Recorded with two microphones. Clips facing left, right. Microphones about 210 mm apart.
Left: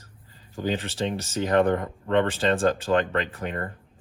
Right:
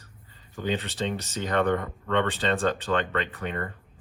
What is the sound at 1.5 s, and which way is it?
Speech, 35° left (ahead or behind).